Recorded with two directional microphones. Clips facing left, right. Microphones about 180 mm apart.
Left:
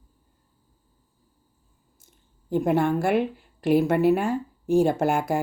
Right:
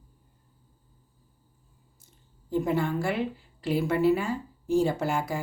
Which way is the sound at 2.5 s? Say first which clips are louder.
Left 5 dB; 55° left (ahead or behind).